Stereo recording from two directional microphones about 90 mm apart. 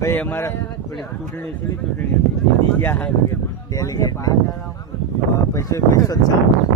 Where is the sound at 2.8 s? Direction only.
25° left (ahead or behind).